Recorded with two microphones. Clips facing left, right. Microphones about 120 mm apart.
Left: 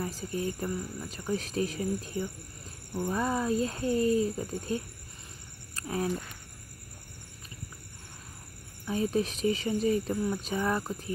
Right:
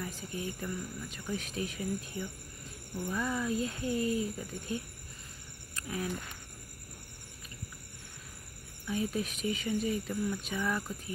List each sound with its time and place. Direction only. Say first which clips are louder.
0.0 s speech: left 6 dB; 35° left (ahead or behind)
8.8 s speech: left 5 dB; 35° left (ahead or behind)